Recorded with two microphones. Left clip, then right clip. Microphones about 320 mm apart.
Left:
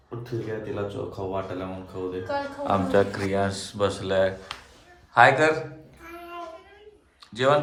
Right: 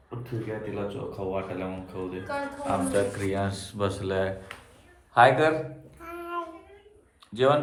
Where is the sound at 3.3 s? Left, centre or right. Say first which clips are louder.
Left 4 dB; centre.